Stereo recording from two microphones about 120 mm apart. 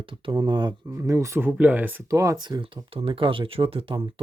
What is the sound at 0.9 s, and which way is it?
Speech, 25° right (ahead or behind).